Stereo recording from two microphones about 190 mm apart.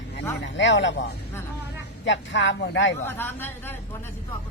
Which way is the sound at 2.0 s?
70° left (ahead or behind).